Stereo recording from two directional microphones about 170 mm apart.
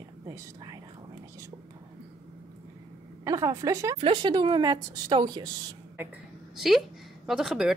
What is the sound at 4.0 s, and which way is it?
A woman's voice, 30° right (ahead or behind).